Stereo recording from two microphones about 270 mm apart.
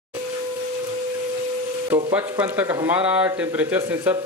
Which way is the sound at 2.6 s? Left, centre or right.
Centre.